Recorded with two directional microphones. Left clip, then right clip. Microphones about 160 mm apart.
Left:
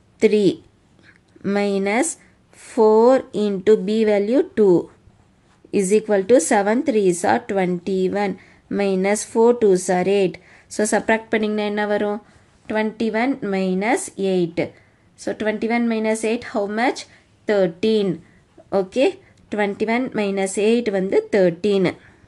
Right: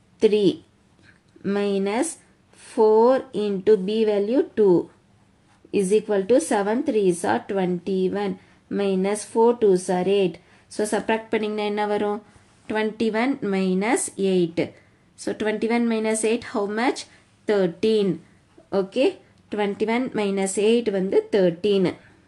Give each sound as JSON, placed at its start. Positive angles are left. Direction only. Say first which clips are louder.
{"t": 0.2, "sound": "a woman's voice", "louder": "left 2 dB", "side_deg": 30}
{"t": 1.0, "sound": "a sound", "louder": "left 3 dB", "side_deg": 30}
{"t": 2.6, "sound": "a woman's voice", "louder": "left 3 dB", "side_deg": 35}
{"t": 18.7, "sound": "a woman's voice", "louder": "left 3 dB", "side_deg": 30}